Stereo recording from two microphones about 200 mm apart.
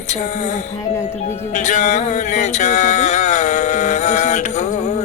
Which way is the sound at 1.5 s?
35° left (ahead or behind).